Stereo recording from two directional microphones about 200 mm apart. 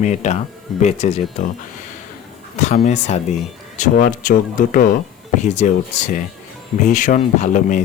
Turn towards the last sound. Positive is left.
turn(degrees=40)  # may be behind; listen again after turning